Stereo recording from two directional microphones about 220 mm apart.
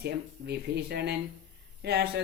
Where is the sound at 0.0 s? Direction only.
45° right (ahead or behind).